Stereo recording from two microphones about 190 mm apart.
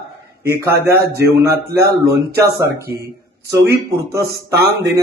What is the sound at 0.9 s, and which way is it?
Speech, 55° right (ahead or behind).